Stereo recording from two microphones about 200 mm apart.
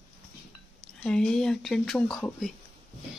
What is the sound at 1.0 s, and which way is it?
Speech, 5° left (ahead or behind).